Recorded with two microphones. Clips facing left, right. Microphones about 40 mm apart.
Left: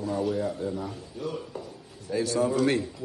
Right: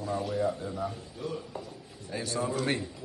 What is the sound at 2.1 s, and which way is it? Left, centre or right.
Speech, right.